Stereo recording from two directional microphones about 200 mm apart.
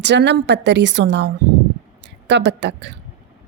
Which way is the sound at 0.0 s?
60° right (ahead or behind).